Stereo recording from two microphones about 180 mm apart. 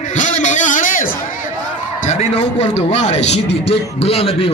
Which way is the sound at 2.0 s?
35° left (ahead or behind).